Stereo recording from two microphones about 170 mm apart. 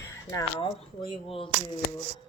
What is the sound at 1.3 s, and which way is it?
Speech, 30° left (ahead or behind).